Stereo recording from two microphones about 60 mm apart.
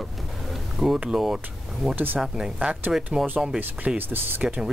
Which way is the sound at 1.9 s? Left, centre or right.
Right.